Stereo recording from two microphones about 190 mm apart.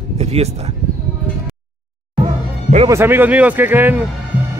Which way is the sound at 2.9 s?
10° right (ahead or behind).